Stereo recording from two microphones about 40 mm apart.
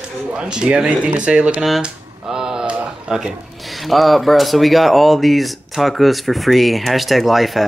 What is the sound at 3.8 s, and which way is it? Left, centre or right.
Speech, centre.